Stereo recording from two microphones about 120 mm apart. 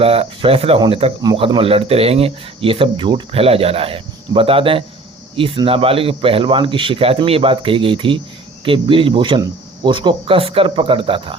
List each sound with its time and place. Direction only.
0.0 s speech: 50° right (ahead or behind)